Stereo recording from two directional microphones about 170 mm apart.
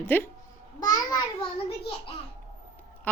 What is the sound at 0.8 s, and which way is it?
Speech, 20° left (ahead or behind).